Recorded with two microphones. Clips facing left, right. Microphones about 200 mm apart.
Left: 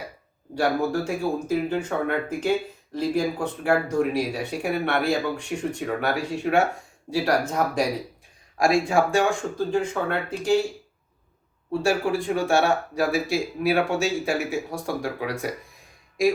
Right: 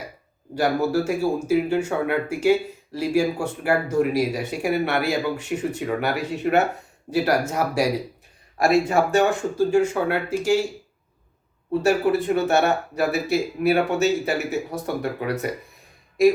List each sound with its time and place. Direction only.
0.5 s speech: 5° right (ahead or behind)
11.8 s speech: 5° right (ahead or behind)